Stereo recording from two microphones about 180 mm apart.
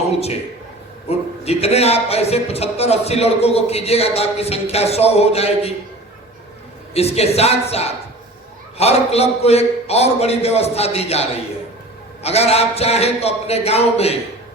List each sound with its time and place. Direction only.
0.1 s a man's voice: 35° left (ahead or behind)
6.9 s a man's voice: 35° left (ahead or behind)